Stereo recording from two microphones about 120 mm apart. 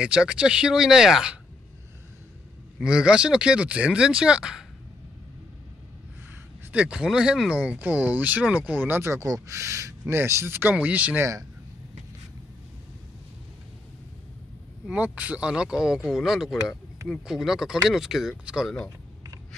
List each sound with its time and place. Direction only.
0.0 s speech: 5° right (ahead or behind)
2.8 s speech: 5° right (ahead or behind)
6.7 s speech: 10° right (ahead or behind)
14.9 s speech: 10° right (ahead or behind)